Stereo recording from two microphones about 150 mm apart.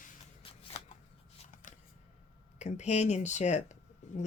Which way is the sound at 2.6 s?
50° left (ahead or behind).